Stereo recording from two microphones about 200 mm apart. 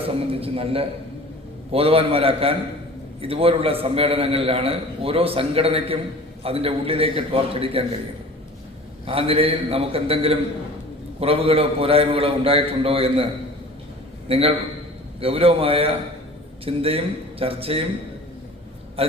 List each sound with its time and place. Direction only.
0.3 s a man's voice: 30° right (ahead or behind)
9.0 s a man's voice: 30° right (ahead or behind)
14.3 s a man's voice: 30° right (ahead or behind)
19.0 s a man's voice: 30° right (ahead or behind)